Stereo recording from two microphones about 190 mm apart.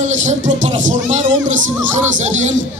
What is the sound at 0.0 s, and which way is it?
A man's voice, 40° right (ahead or behind).